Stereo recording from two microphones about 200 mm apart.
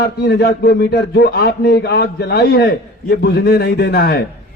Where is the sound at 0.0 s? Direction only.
55° left (ahead or behind).